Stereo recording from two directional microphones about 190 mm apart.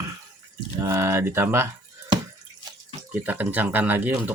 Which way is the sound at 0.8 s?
15° right (ahead or behind).